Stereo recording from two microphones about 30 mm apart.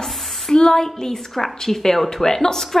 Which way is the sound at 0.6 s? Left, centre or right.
Left.